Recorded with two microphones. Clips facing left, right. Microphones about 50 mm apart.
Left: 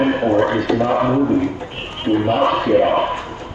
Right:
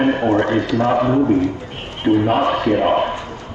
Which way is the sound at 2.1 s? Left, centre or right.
Right.